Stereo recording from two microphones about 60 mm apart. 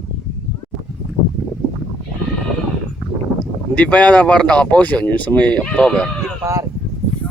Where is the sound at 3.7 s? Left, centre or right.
Left.